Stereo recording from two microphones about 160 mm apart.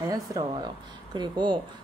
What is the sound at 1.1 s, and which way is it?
Speech, 30° right (ahead or behind).